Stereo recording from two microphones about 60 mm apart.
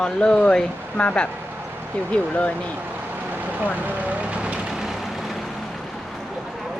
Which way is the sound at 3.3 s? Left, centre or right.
Right.